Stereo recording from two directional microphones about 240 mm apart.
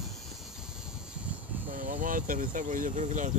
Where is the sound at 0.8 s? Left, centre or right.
Centre.